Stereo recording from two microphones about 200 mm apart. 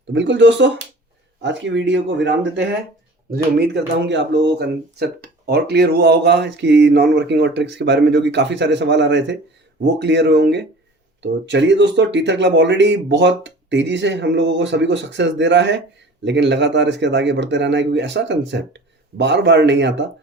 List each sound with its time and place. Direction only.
0.1 s speech: 65° right (ahead or behind)
3.2 s speech: 50° right (ahead or behind)